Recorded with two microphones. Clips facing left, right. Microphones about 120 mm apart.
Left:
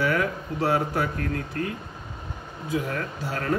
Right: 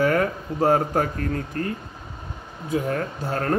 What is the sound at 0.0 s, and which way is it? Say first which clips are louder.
Speech: right 4 dB; 45° right (ahead or behind).